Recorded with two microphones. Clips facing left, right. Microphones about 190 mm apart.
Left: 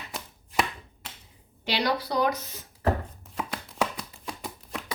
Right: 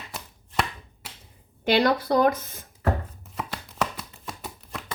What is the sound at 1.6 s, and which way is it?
Speech, 50° right (ahead or behind).